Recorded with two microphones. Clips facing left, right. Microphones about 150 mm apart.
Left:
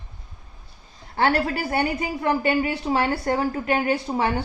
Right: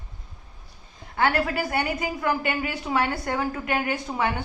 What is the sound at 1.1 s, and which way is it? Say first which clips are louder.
Speech: left 2 dB; 30° left (ahead or behind).